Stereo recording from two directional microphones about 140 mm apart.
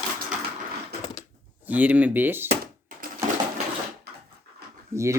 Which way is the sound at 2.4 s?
90° right.